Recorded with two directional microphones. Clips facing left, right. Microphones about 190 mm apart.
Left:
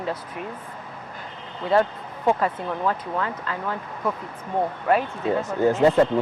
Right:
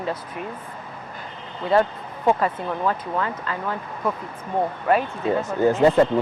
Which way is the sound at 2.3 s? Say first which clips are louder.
Right 1 dB; 20° right (ahead or behind).